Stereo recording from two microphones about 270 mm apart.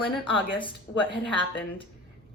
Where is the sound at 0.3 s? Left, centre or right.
Centre.